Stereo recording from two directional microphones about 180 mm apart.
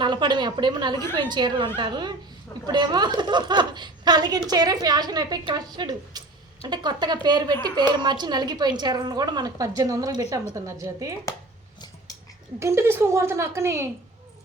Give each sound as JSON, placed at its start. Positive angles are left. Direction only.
{"t": 0.0, "sound": "a woman's voice", "side_deg": -25}
{"t": 12.5, "sound": "a woman's voice", "side_deg": -15}